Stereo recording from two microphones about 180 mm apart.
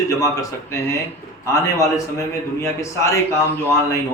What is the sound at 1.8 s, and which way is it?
A man's voice, 15° left (ahead or behind).